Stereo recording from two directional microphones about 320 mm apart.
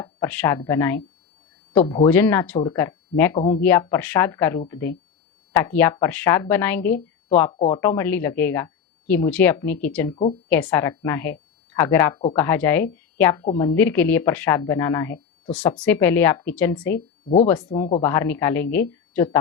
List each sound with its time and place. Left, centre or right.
0.0 s speech: centre
2.0 s speech: centre
3.3 s speech: centre
3.6 s a woman's voice: centre
17.2 s speech: left
17.5 s speech: centre